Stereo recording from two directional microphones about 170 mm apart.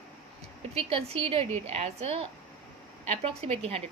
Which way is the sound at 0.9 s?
35° right (ahead or behind).